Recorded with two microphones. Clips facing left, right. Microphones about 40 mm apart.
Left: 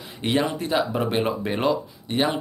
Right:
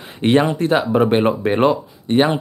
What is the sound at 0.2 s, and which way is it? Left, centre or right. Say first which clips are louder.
Speech: right 8 dB; right.